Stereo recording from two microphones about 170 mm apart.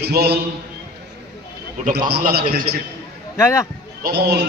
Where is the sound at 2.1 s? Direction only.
65° right (ahead or behind).